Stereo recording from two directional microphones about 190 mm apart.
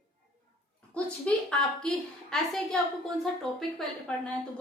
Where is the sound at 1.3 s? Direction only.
5° left (ahead or behind).